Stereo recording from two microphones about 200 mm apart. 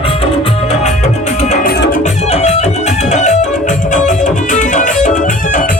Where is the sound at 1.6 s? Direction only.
50° left (ahead or behind).